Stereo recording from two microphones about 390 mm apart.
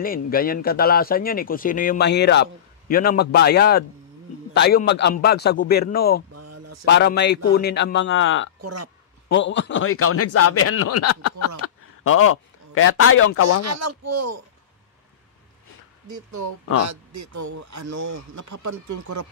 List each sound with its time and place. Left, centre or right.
0.0 s speech: left
6.3 s a sound: right
6.8 s speech: left
8.5 s speech: right
9.3 s a man's voice: left
13.6 s speech: right
16.1 s speech: right